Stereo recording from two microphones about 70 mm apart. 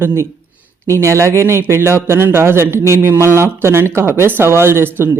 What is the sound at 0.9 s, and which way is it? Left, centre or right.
Speech, right.